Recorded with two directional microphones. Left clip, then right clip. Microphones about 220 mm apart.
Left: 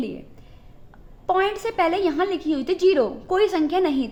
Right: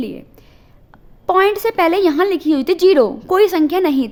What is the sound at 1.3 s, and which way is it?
A woman's voice, 45° right (ahead or behind).